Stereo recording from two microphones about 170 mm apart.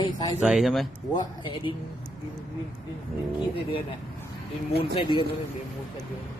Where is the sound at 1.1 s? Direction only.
30° left (ahead or behind).